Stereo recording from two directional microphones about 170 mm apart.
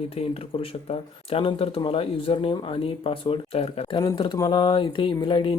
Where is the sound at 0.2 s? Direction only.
35° left (ahead or behind).